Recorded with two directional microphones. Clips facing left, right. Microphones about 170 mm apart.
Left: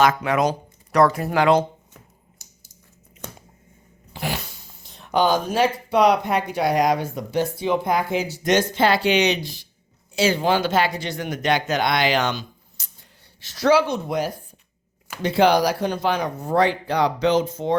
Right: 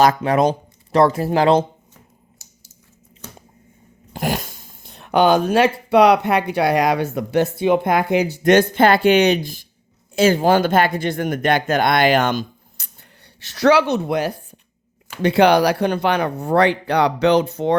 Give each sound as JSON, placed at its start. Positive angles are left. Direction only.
{"t": 0.0, "sound": "speech", "side_deg": -35}
{"t": 4.1, "sound": "speech", "side_deg": -45}